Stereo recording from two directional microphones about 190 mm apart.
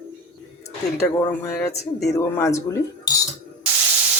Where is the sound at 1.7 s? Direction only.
60° left (ahead or behind).